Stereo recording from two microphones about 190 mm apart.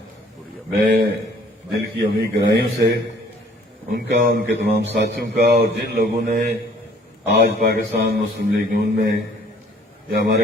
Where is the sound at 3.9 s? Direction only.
60° right (ahead or behind).